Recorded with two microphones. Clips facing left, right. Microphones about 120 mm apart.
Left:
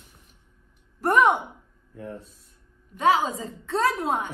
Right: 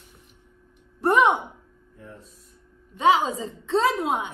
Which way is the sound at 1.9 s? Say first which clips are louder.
Left 8 dB; 70° left (ahead or behind).